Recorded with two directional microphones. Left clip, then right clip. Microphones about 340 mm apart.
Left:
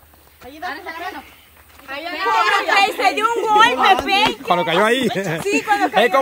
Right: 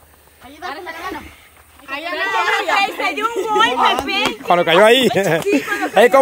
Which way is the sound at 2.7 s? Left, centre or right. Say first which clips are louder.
Left 2 dB; centre.